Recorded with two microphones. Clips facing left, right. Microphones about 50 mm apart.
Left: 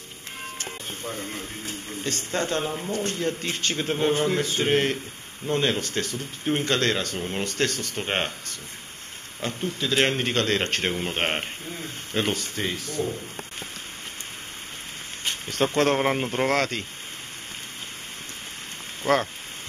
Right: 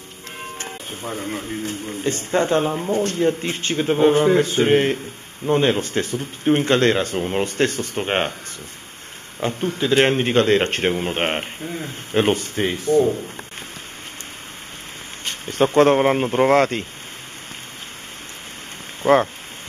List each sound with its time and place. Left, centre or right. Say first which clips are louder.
1.0 s speech: right 7 dB; centre
9.4 s speech: right 7 dB; centre
12.1 s speech: right 8 dB; right
15.6 s speech: right 7 dB; centre
16.5 s speech: right 8 dB; right
19.0 s speech: right 7 dB; right